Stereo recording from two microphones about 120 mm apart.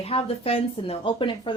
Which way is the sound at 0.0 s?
55° left (ahead or behind).